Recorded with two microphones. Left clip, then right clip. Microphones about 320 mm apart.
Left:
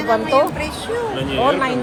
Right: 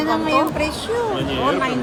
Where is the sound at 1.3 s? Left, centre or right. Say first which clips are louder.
Left 5 dB; centre.